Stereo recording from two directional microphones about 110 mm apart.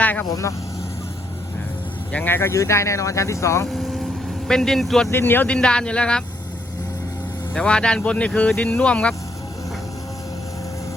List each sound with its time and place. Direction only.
0.0 s speech: 15° left (ahead or behind)
0.3 s speech: 30° left (ahead or behind)
2.1 s speech: 20° left (ahead or behind)
3.7 s vehicle: centre (ahead or behind)
5.1 s speech: 20° left (ahead or behind)
7.5 s speech: 10° left (ahead or behind)